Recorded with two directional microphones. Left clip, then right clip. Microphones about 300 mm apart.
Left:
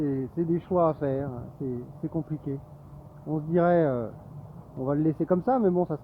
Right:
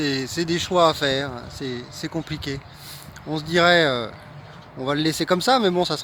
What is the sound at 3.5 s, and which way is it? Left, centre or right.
Speech, centre.